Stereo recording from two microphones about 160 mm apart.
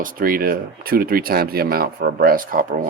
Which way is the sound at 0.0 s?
60° right (ahead or behind).